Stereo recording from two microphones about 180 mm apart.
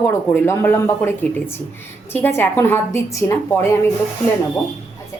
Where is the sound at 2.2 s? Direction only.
10° left (ahead or behind).